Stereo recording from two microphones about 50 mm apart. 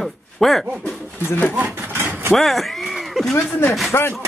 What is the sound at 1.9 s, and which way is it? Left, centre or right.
Vehicle, right.